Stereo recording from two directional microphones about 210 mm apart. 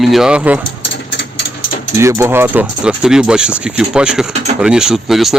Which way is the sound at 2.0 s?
15° right (ahead or behind).